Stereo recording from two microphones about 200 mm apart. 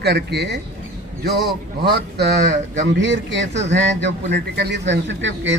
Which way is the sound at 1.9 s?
55° right (ahead or behind).